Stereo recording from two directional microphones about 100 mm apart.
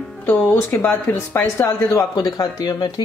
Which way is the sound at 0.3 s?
20° left (ahead or behind).